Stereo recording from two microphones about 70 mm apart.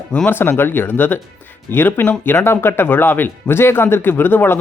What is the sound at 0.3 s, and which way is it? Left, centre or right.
Speech, left.